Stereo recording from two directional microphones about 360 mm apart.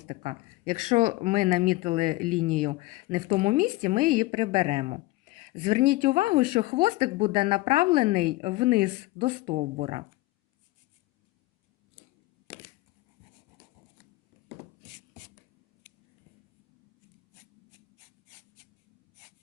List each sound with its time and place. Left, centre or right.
0.1 s speech: centre